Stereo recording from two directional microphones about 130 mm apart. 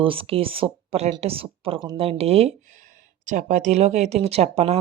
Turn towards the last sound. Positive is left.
turn(degrees=-50)  # may be behind; listen again after turning